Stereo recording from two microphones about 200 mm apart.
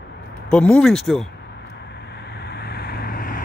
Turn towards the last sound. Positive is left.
turn(degrees=45)  # may be behind; listen again after turning